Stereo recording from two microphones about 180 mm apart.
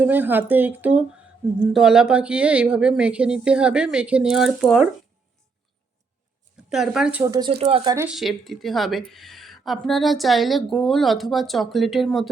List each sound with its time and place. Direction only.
0.0 s a woman's voice: 10° right (ahead or behind)
6.7 s a woman's voice: 5° right (ahead or behind)
7.6 s speech: 35° right (ahead or behind)
8.0 s a woman's voice: centre (ahead or behind)